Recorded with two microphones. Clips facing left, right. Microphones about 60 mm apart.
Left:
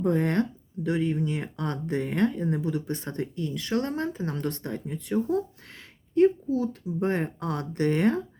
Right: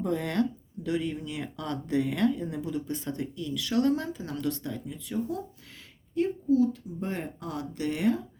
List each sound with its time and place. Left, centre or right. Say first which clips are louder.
0.0 s speech: left 3 dB; left
2.6 s speech: left 2 dB; left